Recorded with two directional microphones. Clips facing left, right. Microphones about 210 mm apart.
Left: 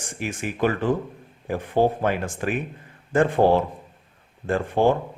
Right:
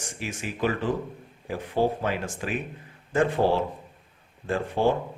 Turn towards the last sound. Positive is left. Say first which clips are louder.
# left 4 dB
turn(degrees=55)  # may be behind; listen again after turning